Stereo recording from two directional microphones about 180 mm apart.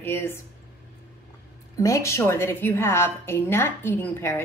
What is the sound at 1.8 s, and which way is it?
Speech, 15° left (ahead or behind).